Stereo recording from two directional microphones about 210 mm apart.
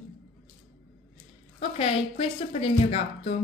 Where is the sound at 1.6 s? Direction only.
30° left (ahead or behind).